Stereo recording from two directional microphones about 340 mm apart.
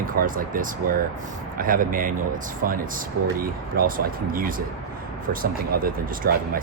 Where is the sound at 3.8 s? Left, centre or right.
Right.